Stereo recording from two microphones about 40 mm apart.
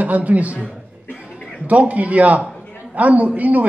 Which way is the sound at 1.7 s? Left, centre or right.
Right.